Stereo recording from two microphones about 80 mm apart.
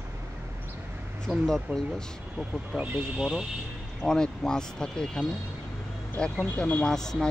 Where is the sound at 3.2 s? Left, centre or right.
Centre.